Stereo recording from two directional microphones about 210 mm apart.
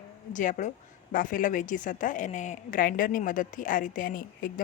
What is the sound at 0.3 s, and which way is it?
A woman's voice, 35° left (ahead or behind).